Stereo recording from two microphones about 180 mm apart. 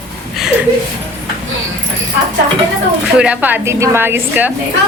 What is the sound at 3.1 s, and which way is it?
A woman's voice, 5° right (ahead or behind).